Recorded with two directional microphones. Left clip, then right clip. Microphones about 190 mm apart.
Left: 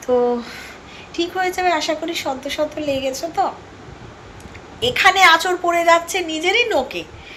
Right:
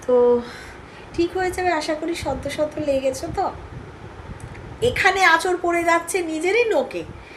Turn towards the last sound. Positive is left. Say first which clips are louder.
# left 1 dB
turn(degrees=-15)  # may be behind; listen again after turning